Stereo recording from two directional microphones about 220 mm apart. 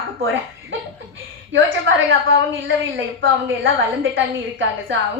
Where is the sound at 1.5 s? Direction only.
60° right (ahead or behind).